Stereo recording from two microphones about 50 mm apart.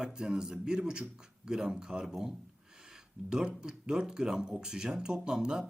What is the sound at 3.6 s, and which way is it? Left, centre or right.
Speech, centre.